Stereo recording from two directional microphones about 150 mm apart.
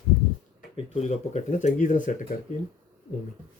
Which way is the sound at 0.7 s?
45° left (ahead or behind).